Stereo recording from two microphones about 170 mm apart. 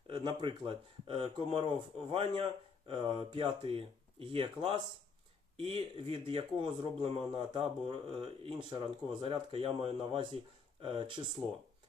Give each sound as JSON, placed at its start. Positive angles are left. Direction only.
{"t": 0.1, "sound": "speech", "side_deg": -25}